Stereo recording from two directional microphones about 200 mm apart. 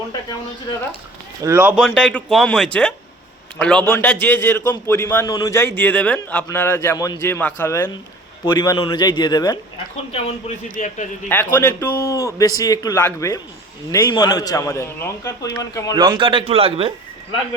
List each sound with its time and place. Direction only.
1.4 s speech: 15° right (ahead or behind)
1.8 s a man's voice: 5° left (ahead or behind); by 9.6 s 20° left (ahead or behind)
10.1 s a man's voice: 30° left (ahead or behind)
11.6 s a man's voice: 15° left (ahead or behind)
16.0 s a man's voice: 25° right (ahead or behind)